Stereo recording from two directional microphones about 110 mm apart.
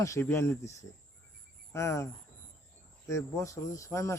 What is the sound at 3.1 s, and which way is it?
Speech, 25° left (ahead or behind).